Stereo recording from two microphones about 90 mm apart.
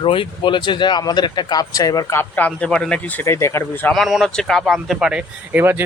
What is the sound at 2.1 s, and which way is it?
Speech, 20° left (ahead or behind).